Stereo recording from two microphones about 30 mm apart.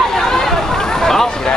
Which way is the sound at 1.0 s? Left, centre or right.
Centre.